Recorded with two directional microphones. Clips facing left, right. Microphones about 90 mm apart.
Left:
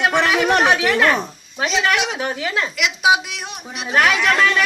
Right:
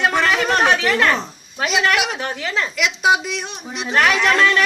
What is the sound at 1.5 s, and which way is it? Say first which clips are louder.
A woman's voice: right 1 dB; centre (ahead or behind).